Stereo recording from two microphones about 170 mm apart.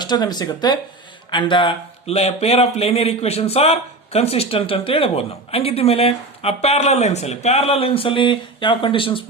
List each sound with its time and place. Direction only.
0.0 s speech: 25° left (ahead or behind)